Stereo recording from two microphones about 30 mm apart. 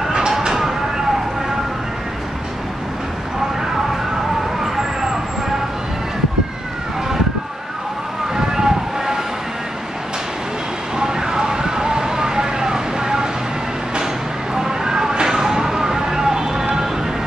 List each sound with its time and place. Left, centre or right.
8.4 s vehicle: centre
11.0 s vehicle: right
14.5 s a sound: right